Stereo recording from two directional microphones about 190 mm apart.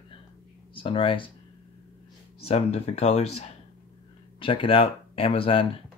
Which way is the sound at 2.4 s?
30° left (ahead or behind).